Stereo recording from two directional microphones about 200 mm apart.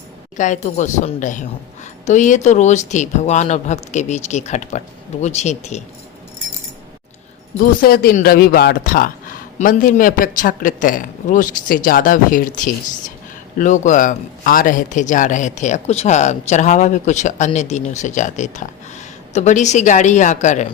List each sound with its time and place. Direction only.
0.3 s speech: 40° left (ahead or behind)
7.6 s a man's voice: 45° left (ahead or behind)